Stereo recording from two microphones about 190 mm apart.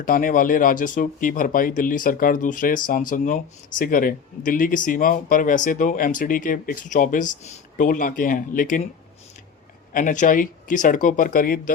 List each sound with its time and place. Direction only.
0.0 s speech: 45° left (ahead or behind)
9.9 s speech: 45° left (ahead or behind)